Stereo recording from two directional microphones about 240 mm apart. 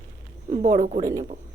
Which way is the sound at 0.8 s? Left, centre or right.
Right.